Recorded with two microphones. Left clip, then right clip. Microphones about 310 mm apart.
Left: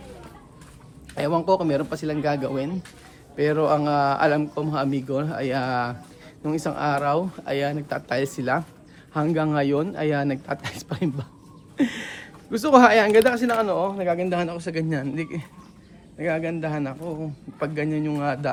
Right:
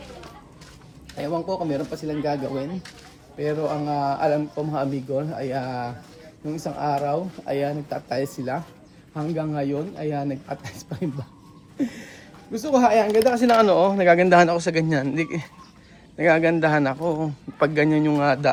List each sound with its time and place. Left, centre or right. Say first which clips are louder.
1.2 s speech: left 5 dB; centre
3.8 s speech: left 2 dB; centre
12.5 s speech: left 4 dB; centre
13.6 s speech: right 6 dB; right
14.3 s speech: right 10 dB; centre